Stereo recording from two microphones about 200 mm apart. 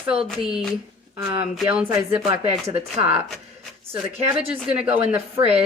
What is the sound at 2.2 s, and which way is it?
Speech, 30° right (ahead or behind).